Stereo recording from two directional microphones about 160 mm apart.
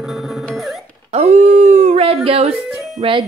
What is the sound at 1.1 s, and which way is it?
Dog, 45° right (ahead or behind).